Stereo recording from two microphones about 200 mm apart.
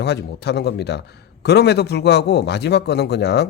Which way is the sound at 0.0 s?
55° left (ahead or behind).